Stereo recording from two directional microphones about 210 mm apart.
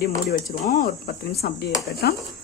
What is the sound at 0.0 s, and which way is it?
Speech, 50° left (ahead or behind).